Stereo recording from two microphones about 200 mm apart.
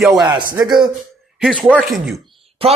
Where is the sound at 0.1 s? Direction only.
20° right (ahead or behind).